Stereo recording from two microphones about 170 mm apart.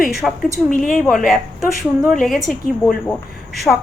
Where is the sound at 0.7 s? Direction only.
50° left (ahead or behind).